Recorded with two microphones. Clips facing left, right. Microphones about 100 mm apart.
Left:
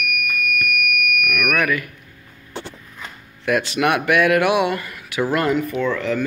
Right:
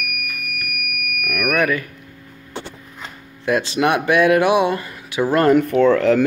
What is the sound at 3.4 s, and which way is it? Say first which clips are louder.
Speech: right 1 dB; 25° right (ahead or behind).